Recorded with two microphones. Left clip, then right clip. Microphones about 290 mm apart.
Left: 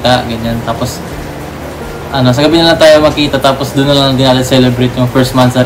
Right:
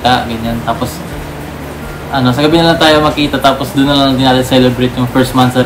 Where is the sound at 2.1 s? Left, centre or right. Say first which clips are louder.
Left 1 dB; centre.